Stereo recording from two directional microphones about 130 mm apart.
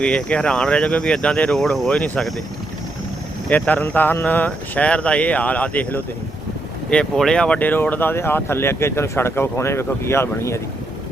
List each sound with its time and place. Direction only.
0.0 s speech: 5° left (ahead or behind)
3.5 s speech: 10° left (ahead or behind)